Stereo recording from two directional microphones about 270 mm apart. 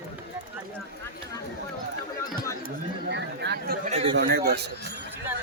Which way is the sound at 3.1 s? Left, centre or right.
Right.